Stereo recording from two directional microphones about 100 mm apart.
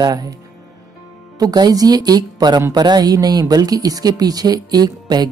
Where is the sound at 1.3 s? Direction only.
40° right (ahead or behind).